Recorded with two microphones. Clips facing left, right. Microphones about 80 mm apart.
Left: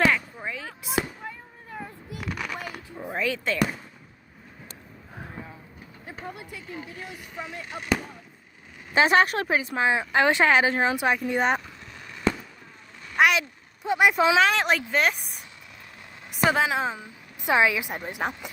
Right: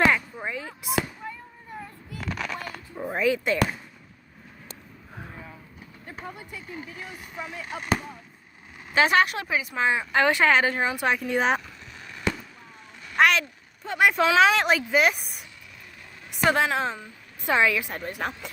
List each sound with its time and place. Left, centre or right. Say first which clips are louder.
0.1 s a sound: right 2 dB; centre
2.0 s a sound: right 2 dB; centre
3.0 s basketball bounce: right 4 dB; centre
5.2 s vehicle: left 2 dB; centre
9.0 s a woman's voice: left 1 dB; left
9.7 s speech: even; centre
11.0 s a woman's voice: even; centre
13.1 s a sound: even; centre
14.4 s a woman's voice: right 2 dB; centre